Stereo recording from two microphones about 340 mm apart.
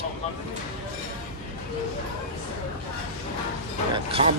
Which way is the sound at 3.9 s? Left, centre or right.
Centre.